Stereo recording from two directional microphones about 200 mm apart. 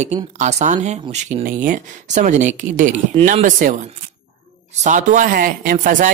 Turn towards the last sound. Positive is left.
turn(degrees=-40)  # may be behind; listen again after turning